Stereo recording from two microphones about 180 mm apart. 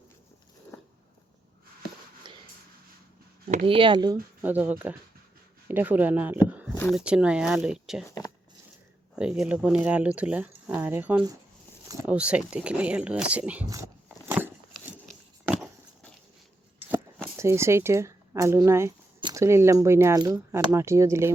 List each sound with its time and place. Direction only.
2.3 s a sound: 25° right (ahead or behind)
3.4 s speech: 45° right (ahead or behind)
3.7 s speech: 30° right (ahead or behind)
4.4 s speech: 10° right (ahead or behind)
8.0 s speech: 20° left (ahead or behind)
9.1 s speech: 5° right (ahead or behind)
14.3 s a sound: 10° right (ahead or behind)
17.3 s speech: 15° right (ahead or behind)